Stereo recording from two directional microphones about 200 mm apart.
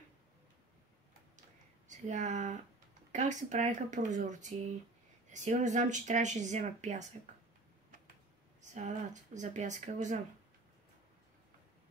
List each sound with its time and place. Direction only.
1.9 s speech: 35° right (ahead or behind)
8.7 s speech: 35° right (ahead or behind)